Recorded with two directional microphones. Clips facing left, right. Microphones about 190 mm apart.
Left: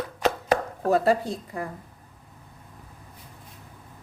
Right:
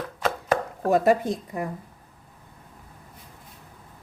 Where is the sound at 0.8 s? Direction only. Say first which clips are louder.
Right 2 dB; 15° right (ahead or behind).